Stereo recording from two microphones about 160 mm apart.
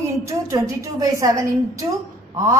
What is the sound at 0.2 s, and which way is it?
A woman's voice, 20° right (ahead or behind).